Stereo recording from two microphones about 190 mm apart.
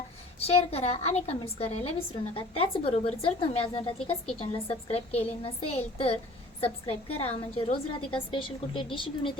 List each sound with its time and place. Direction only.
0.3 s a woman's voice: 30° left (ahead or behind)